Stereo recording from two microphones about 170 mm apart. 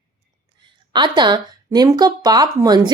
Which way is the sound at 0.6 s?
25° right (ahead or behind).